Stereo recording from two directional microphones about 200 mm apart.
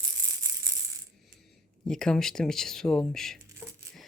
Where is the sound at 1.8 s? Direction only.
5° left (ahead or behind).